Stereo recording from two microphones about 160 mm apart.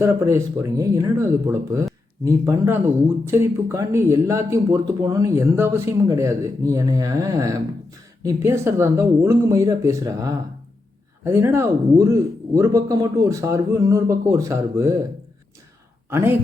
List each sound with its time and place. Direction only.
0.0 s speech: 20° right (ahead or behind)
16.0 s speech: 15° right (ahead or behind)